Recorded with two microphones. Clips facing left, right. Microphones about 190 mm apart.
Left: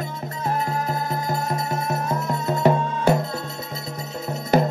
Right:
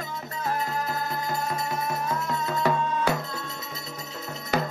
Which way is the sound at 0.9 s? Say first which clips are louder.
Left 4 dB; 35° left (ahead or behind).